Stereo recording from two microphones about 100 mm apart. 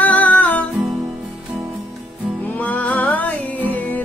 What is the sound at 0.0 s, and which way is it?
Music, 15° left (ahead or behind).